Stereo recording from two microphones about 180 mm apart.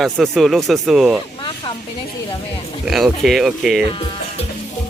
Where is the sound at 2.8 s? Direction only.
Centre (ahead or behind).